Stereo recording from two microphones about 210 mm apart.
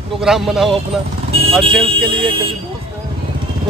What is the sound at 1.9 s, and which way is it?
Speech, 25° right (ahead or behind).